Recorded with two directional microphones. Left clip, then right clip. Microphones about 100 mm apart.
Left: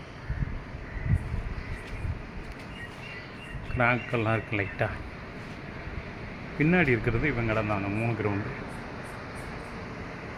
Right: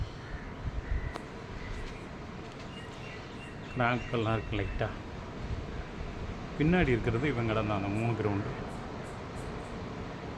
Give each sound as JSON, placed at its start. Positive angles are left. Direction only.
{"t": 3.8, "sound": "speech", "side_deg": 25}
{"t": 6.6, "sound": "speech", "side_deg": 40}